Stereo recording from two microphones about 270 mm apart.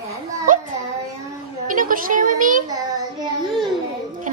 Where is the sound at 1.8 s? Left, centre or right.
Right.